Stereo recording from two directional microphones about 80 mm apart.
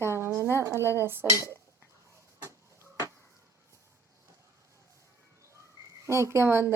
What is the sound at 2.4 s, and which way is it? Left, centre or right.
Chicken, right.